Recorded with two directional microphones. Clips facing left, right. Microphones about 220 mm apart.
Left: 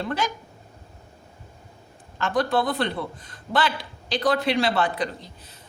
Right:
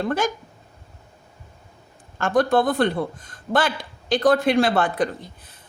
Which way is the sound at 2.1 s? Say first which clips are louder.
Right 4 dB; 50° right (ahead or behind).